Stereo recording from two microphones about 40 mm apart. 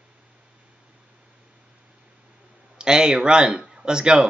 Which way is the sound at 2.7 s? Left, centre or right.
Centre.